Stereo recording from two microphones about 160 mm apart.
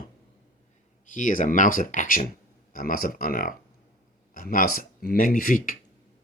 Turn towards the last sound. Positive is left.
turn(degrees=60)  # may be behind; listen again after turning